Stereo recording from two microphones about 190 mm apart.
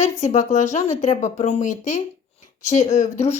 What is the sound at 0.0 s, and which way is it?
Speech, 40° left (ahead or behind).